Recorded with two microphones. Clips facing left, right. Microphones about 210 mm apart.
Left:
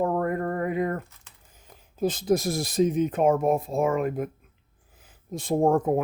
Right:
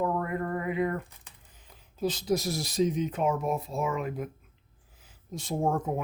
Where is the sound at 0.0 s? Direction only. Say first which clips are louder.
Left 4 dB; 45° left (ahead or behind).